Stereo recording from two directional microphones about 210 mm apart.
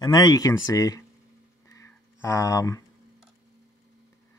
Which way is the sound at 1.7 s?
15° left (ahead or behind).